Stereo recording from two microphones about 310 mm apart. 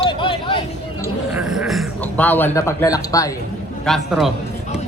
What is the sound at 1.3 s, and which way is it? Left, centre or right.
A man's voice, centre.